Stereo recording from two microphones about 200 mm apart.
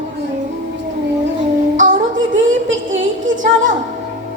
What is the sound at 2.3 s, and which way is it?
A woman's voice, 70° right (ahead or behind).